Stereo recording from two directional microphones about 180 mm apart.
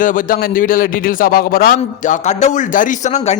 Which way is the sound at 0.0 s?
50° left (ahead or behind).